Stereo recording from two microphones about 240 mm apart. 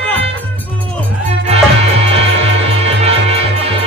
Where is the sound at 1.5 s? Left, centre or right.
Right.